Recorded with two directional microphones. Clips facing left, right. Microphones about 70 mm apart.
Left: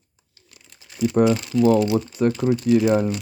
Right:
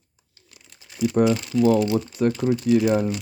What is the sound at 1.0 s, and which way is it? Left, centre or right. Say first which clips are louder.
Speech: left 1 dB; left.